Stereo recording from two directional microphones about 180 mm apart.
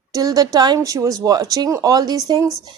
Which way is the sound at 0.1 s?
20° right (ahead or behind).